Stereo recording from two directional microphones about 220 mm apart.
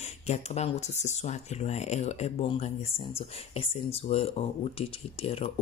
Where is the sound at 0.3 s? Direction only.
30° left (ahead or behind).